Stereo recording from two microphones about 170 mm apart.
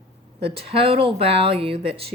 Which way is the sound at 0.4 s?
35° right (ahead or behind).